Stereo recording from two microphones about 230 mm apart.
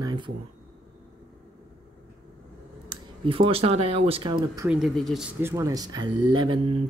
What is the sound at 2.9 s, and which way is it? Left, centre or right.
Speech, right.